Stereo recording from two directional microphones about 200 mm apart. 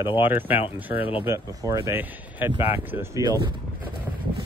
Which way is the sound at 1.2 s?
15° right (ahead or behind).